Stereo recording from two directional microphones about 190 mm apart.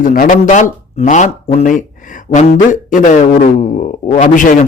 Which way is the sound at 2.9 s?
45° left (ahead or behind).